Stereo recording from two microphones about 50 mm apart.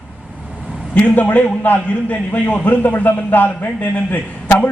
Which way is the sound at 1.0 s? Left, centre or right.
Left.